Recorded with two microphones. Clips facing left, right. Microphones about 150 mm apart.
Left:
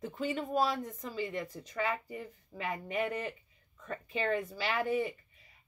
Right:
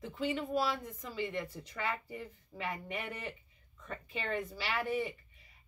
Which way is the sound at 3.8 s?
40° left (ahead or behind).